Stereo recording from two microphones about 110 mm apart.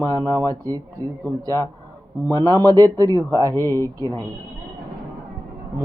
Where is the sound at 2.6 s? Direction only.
35° right (ahead or behind).